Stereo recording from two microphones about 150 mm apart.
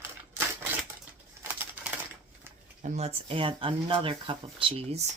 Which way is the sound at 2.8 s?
45° right (ahead or behind).